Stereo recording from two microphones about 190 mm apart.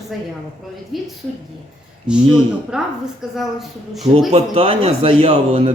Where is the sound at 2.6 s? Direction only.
5° right (ahead or behind).